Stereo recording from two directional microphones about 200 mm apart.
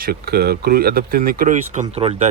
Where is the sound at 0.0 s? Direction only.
50° right (ahead or behind).